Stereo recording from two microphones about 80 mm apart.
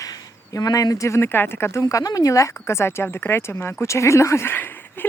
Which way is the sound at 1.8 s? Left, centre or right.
Left.